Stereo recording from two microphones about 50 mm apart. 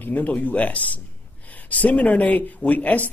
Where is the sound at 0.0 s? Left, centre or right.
Left.